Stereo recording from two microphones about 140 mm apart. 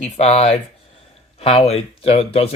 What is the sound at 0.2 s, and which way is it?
Speech, 45° left (ahead or behind).